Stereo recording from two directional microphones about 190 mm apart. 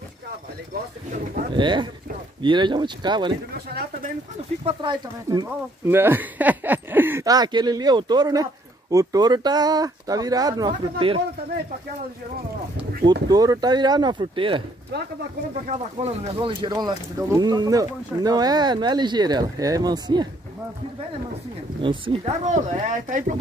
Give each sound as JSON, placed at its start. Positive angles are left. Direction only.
{"t": 1.5, "sound": "speech", "side_deg": -25}
{"t": 4.6, "sound": "speech", "side_deg": -25}
{"t": 13.3, "sound": "speech", "side_deg": -20}
{"t": 15.6, "sound": "speech", "side_deg": -35}
{"t": 21.8, "sound": "speech", "side_deg": -25}